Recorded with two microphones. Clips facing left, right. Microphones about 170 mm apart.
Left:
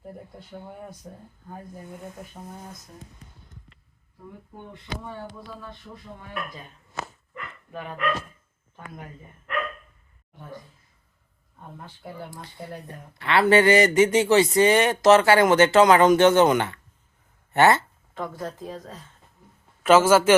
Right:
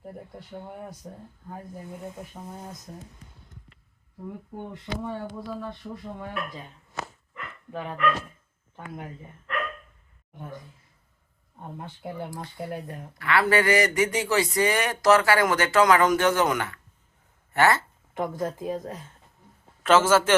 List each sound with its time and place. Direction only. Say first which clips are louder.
0.0 s speech: right 1 dB; centre (ahead or behind)
7.7 s speech: right 2 dB; 20° right (ahead or behind)
12.4 s speech: right 4 dB; 20° right (ahead or behind)
13.1 s speech: left 4 dB; 25° left (ahead or behind)
18.1 s speech: right 4 dB; 20° right (ahead or behind)
19.8 s a man's voice: left 3 dB; 10° left (ahead or behind)